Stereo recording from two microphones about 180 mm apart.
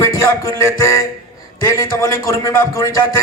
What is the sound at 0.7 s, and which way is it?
A man's voice, 20° left (ahead or behind).